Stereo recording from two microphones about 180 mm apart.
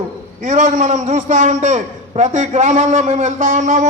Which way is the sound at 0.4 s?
40° right (ahead or behind).